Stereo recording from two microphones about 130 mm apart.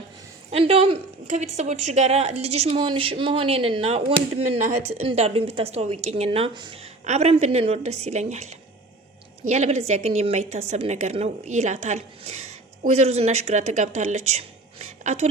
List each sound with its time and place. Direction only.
0.5 s a woman's voice: 50° right (ahead or behind)
6.5 s speech: 35° right (ahead or behind)
7.0 s a woman's voice: 60° right (ahead or behind)